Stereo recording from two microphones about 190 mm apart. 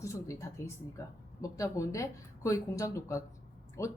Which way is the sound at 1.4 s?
15° left (ahead or behind).